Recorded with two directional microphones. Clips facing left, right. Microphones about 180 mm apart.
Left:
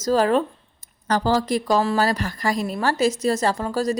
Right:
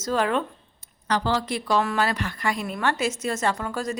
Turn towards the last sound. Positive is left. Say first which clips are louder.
# left 5 dB
turn(degrees=35)  # may be behind; listen again after turning